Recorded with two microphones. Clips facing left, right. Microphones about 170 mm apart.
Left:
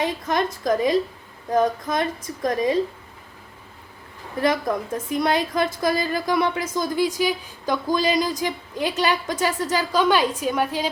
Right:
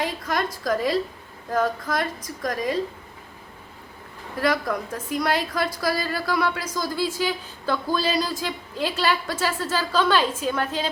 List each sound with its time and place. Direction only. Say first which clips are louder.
0.0 s a woman's voice: left 3 dB; 20° left (ahead or behind)
4.4 s a woman's voice: left 2 dB; 20° left (ahead or behind)